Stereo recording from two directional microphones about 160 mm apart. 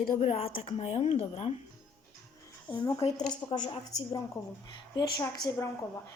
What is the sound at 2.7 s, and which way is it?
A woman's voice, 25° left (ahead or behind).